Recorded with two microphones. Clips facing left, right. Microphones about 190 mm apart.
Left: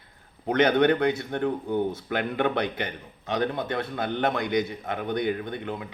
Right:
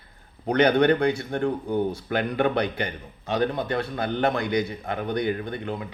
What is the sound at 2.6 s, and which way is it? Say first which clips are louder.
A man's voice: right 2 dB; 20° left (ahead or behind).